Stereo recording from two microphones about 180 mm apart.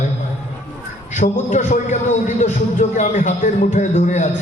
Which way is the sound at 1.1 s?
40° left (ahead or behind).